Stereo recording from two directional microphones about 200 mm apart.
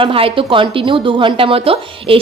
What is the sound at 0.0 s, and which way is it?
A woman's voice, 25° right (ahead or behind).